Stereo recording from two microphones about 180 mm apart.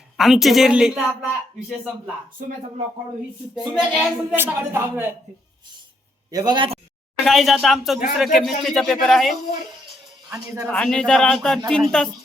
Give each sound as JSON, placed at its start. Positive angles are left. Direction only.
{"t": 0.2, "sound": "a man's voice", "side_deg": 0}
{"t": 3.5, "sound": "a woman's voice", "side_deg": -5}
{"t": 6.3, "sound": "a man's voice", "side_deg": -25}
{"t": 7.3, "sound": "a man's voice", "side_deg": 0}
{"t": 10.7, "sound": "a man's voice", "side_deg": 5}